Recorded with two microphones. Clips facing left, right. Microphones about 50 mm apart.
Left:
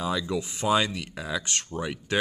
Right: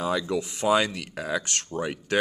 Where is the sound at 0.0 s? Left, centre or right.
Right.